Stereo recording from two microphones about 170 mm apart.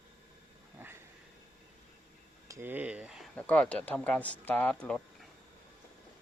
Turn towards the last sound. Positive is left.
turn(degrees=5)  # may be behind; listen again after turning